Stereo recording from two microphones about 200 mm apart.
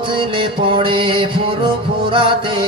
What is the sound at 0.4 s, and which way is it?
Mantra, 25° right (ahead or behind).